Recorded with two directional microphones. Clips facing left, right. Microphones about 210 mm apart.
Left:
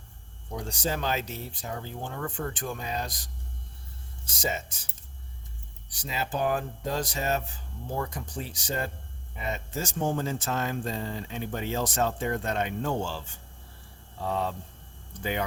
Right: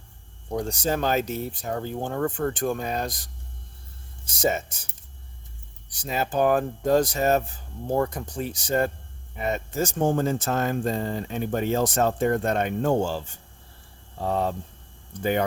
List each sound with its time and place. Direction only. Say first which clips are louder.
0.5 s speech: right 6 dB; 45° right (ahead or behind)
4.4 s speech: right 7 dB; 50° right (ahead or behind)
5.9 s speech: right 5 dB; 50° right (ahead or behind)